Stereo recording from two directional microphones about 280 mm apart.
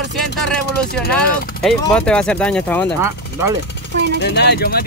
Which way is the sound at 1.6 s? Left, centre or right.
Centre.